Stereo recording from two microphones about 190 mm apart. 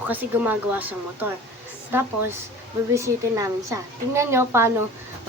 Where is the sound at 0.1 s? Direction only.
10° right (ahead or behind).